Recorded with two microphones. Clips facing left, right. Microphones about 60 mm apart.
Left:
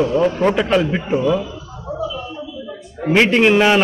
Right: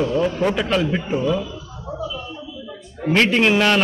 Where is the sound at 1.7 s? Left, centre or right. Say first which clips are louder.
Left 7 dB; centre.